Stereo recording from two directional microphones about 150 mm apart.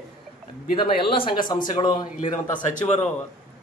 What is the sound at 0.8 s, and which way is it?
Speech, 35° left (ahead or behind).